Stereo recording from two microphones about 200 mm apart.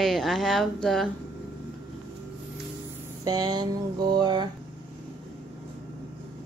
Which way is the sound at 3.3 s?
20° right (ahead or behind).